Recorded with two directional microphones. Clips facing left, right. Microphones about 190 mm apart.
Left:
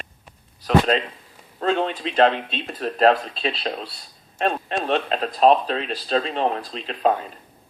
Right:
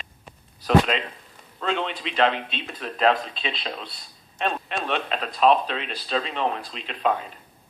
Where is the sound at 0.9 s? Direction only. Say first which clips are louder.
Left 5 dB; 35° left (ahead or behind).